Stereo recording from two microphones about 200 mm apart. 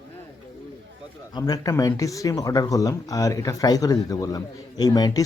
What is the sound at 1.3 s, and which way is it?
Speech, 20° left (ahead or behind).